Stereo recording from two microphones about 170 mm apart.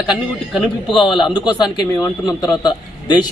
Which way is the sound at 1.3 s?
25° left (ahead or behind).